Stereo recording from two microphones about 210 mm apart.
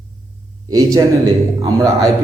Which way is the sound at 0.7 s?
15° right (ahead or behind).